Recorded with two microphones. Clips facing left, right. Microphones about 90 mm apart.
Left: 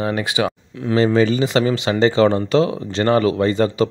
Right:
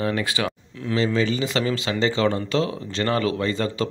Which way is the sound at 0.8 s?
45° left (ahead or behind).